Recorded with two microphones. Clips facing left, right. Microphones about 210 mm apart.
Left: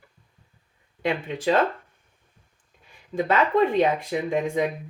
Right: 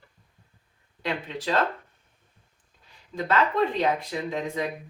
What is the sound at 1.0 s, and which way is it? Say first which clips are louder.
Speech: left 6 dB; 50° left (ahead or behind).